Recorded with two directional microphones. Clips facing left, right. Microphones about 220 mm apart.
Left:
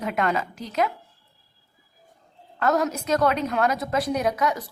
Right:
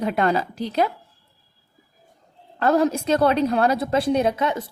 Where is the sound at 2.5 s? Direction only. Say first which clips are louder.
Right 4 dB; 30° right (ahead or behind).